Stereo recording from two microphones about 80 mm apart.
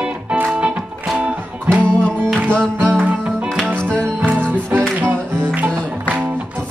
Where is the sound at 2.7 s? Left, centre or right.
Right.